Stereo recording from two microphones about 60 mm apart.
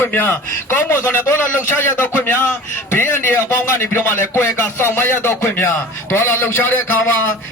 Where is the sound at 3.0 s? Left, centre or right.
Left.